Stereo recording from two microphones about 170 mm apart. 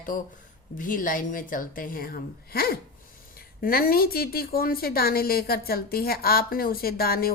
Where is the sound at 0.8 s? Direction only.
55° left (ahead or behind).